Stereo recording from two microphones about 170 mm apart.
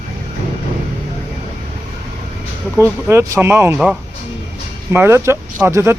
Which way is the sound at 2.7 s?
15° right (ahead or behind).